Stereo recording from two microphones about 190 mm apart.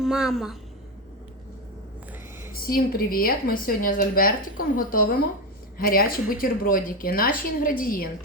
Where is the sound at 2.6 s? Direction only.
50° left (ahead or behind).